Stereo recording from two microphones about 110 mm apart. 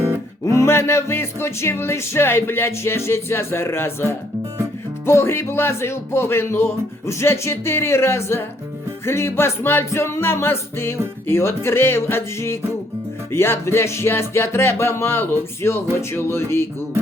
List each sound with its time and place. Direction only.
0.4 s music: 25° left (ahead or behind)